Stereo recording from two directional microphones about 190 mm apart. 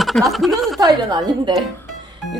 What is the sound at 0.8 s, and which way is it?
Speech, 20° right (ahead or behind).